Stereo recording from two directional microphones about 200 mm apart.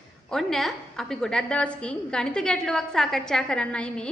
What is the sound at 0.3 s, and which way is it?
A woman's voice, centre (ahead or behind).